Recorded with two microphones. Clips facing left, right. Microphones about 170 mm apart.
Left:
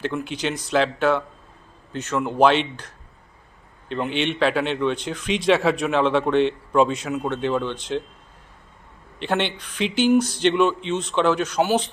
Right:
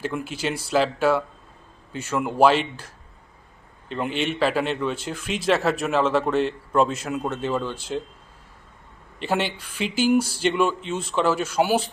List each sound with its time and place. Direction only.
0.0 s a man's voice: 10° right (ahead or behind)
9.1 s speech: 5° right (ahead or behind)